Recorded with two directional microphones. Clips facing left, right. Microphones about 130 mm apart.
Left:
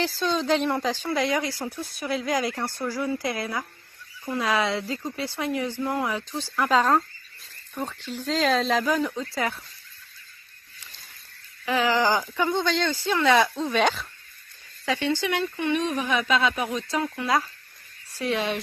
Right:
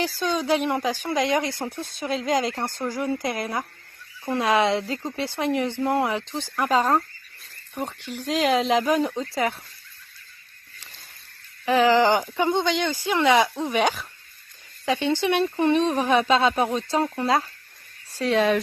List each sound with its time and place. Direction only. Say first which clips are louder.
0.2 s speech: even; 10° right (ahead or behind)
6.6 s speech: even; 10° right (ahead or behind)
11.6 s speech: right 5 dB; 30° right (ahead or behind); by 14.1 s 10° right (ahead or behind)
14.8 s speech: right 3 dB; 20° right (ahead or behind); by 18.6 s 40° right (ahead or behind)